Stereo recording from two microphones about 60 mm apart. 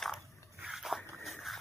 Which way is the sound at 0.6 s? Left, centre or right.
Centre.